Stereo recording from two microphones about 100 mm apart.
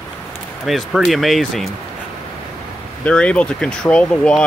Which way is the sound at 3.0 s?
10° left (ahead or behind).